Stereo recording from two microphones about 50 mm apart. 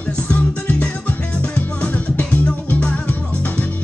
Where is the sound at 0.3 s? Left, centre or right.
Left.